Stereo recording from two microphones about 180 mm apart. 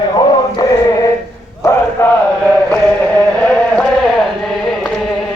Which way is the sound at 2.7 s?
10° left (ahead or behind).